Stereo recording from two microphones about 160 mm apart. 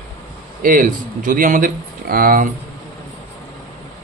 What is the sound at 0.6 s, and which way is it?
A man's voice, 60° right (ahead or behind).